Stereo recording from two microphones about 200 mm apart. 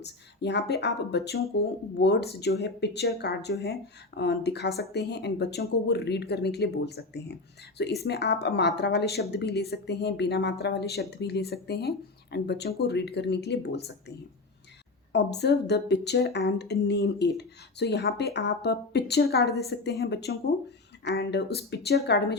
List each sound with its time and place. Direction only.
0.0 s speech: 55° left (ahead or behind)
15.1 s speech: 55° left (ahead or behind)